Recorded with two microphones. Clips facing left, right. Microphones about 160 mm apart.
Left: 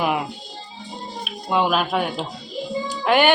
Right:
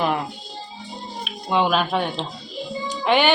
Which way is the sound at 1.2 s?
Centre (ahead or behind).